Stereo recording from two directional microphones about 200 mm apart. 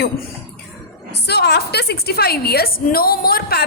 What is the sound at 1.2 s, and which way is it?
A woman's voice, 55° left (ahead or behind).